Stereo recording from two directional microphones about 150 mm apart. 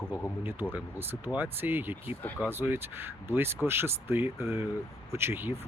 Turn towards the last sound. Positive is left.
turn(degrees=-15)  # may be behind; listen again after turning